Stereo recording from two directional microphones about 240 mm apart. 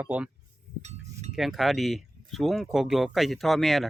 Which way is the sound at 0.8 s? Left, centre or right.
Right.